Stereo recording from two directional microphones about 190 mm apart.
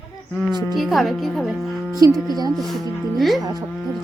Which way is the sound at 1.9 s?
20° right (ahead or behind).